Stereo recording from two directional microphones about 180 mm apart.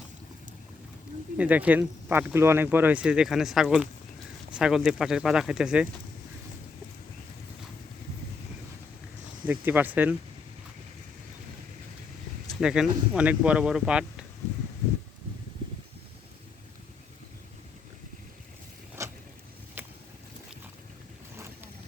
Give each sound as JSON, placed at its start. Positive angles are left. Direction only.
{"t": 1.4, "sound": "speech", "side_deg": -10}
{"t": 9.5, "sound": "speech", "side_deg": -10}
{"t": 12.5, "sound": "speech", "side_deg": -5}
{"t": 19.0, "sound": "a sound", "side_deg": -15}